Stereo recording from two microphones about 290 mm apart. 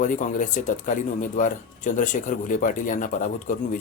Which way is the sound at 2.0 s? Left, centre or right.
Left.